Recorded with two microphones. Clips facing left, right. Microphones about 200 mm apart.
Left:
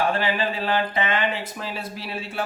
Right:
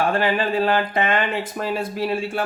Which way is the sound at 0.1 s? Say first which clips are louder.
Right 4 dB; 50° right (ahead or behind).